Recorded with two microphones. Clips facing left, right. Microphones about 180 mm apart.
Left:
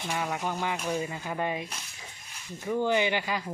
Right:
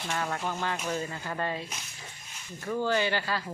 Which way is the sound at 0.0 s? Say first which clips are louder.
Left 1 dB; 10° left (ahead or behind).